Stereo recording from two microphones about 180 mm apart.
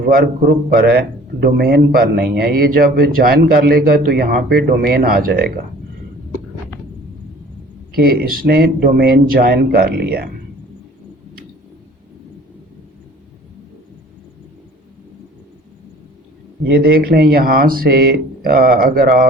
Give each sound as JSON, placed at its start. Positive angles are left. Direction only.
{"t": 0.1, "sound": "a man's voice", "side_deg": -55}
{"t": 7.9, "sound": "a man's voice", "side_deg": -55}
{"t": 16.6, "sound": "a man's voice", "side_deg": -60}